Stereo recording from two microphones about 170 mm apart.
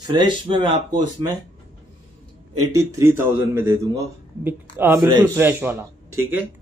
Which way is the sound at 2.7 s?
15° right (ahead or behind).